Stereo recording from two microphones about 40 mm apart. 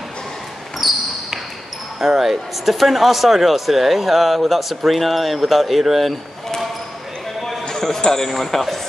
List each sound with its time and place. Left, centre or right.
0.7 s basketball bounce: centre
2.0 s speech: centre
8.0 s a man's voice: centre